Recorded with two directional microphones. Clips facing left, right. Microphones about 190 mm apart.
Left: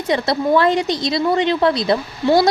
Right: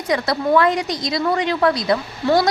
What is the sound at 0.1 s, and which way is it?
Speech, 30° left (ahead or behind).